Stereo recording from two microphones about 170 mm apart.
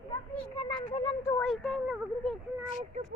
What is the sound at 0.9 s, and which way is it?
Speech, 25° left (ahead or behind).